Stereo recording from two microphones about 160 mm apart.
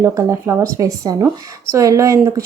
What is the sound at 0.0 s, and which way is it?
Speech, 20° right (ahead or behind).